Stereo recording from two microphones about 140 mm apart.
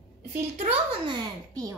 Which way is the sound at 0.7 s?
35° right (ahead or behind).